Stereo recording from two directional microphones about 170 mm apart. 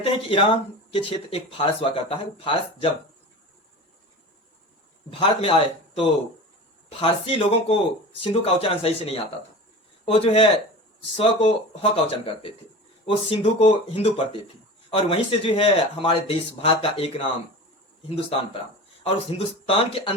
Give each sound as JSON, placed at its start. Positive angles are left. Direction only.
{"t": 0.0, "sound": "speech", "side_deg": 30}
{"t": 5.2, "sound": "speech", "side_deg": 30}
{"t": 18.3, "sound": "speech", "side_deg": 35}